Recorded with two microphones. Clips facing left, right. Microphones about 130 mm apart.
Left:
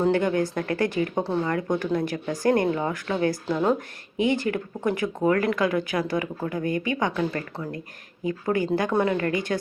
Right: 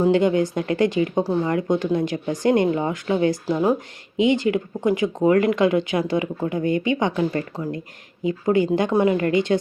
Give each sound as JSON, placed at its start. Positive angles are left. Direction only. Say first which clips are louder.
{"t": 0.1, "sound": "speech", "louder": "right 4 dB", "side_deg": -20}